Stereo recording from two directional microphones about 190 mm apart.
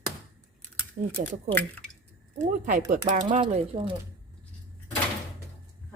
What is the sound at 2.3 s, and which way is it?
Speech, 40° right (ahead or behind).